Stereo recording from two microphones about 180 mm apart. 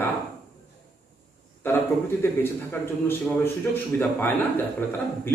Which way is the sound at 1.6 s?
10° left (ahead or behind).